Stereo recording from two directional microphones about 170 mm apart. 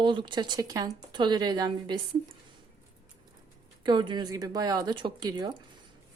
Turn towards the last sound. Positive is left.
turn(degrees=-25)  # may be behind; listen again after turning